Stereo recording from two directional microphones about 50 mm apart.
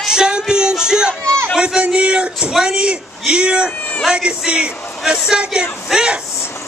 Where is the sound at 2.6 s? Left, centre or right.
Centre.